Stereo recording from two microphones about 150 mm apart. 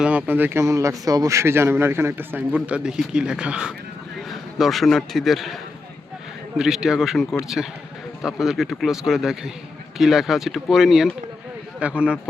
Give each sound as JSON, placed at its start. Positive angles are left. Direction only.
{"t": 0.0, "sound": "a man's voice", "side_deg": -10}
{"t": 6.6, "sound": "speech", "side_deg": -5}